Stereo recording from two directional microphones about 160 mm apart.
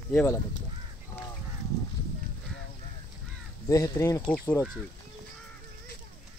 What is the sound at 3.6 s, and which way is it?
Speech, 20° left (ahead or behind).